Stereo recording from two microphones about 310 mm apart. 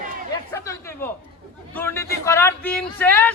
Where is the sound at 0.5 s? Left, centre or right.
Centre.